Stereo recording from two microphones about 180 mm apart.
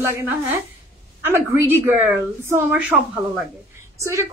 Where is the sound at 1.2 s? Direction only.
10° right (ahead or behind).